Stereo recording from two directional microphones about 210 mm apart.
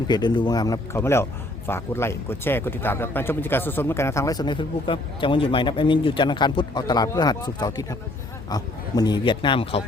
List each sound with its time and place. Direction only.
0.1 s speech: 20° left (ahead or behind)